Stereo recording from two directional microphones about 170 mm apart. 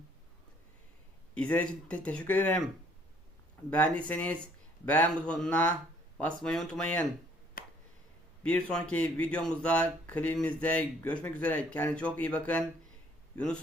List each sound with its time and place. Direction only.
1.4 s speech: 10° left (ahead or behind)
3.7 s speech: 10° left (ahead or behind)
7.6 s finger snapping: 55° left (ahead or behind)
8.7 s a man's voice: 10° left (ahead or behind)